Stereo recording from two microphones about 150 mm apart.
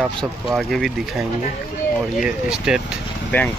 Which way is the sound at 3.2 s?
10° left (ahead or behind).